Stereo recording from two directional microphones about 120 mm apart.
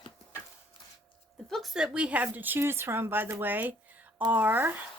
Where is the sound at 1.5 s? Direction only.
Centre (ahead or behind).